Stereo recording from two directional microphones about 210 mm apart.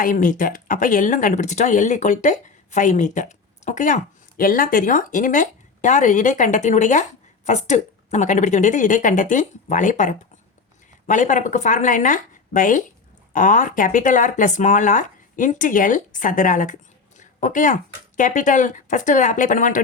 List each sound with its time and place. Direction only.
0.0 s speech: 40° left (ahead or behind)
17.2 s a sound: 35° left (ahead or behind)
18.2 s speech: 40° left (ahead or behind)